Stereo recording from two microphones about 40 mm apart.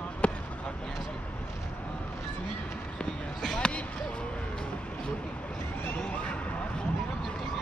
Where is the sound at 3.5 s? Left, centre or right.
Left.